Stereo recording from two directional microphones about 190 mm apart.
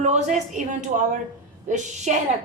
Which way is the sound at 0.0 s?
35° right (ahead or behind).